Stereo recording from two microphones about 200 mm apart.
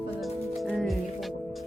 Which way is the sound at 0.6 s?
Centre (ahead or behind).